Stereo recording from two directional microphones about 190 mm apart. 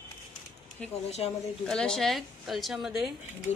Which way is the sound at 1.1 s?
30° left (ahead or behind).